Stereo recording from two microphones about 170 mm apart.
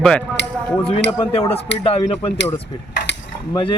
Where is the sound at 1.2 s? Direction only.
35° left (ahead or behind).